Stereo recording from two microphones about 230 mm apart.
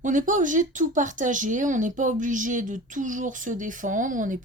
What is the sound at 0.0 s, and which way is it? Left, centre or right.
Speech, right.